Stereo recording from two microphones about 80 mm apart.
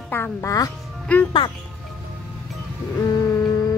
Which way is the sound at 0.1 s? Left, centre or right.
Left.